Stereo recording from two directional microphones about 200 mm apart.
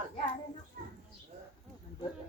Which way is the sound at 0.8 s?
50° right (ahead or behind).